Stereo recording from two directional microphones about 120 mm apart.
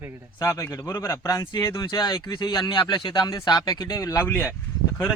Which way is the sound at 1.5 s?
35° left (ahead or behind).